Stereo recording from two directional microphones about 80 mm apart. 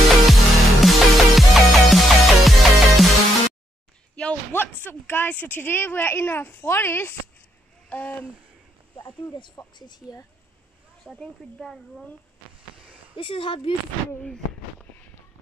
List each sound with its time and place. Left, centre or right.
0.1 s music: centre
4.1 s a sound: centre
4.5 s a woman's voice: left
7.9 s a woman's voice: centre
8.9 s speech: left
11.1 s speech: centre
13.1 s speech: left
14.2 s a sound: centre